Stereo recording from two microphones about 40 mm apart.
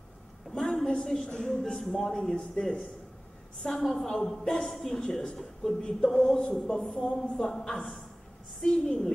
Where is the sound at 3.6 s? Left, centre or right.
Centre.